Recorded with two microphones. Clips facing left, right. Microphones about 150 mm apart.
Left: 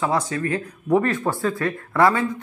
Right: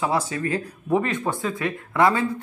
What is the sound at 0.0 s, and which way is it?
A man's voice, 25° right (ahead or behind).